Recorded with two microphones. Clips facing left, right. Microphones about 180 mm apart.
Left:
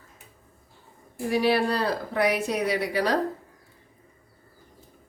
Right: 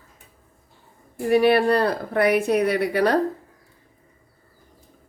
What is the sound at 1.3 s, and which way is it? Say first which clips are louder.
Speech: right 6 dB; 60° right (ahead or behind).